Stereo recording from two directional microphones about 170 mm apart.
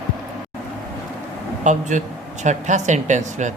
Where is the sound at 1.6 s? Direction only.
45° right (ahead or behind).